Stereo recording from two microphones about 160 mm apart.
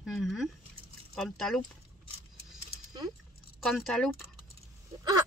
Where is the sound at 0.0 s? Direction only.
Centre (ahead or behind).